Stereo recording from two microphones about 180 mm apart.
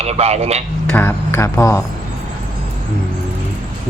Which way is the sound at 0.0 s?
35° right (ahead or behind).